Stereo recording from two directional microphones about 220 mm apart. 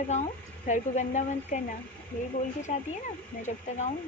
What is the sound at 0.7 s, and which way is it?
Speech, 35° left (ahead or behind).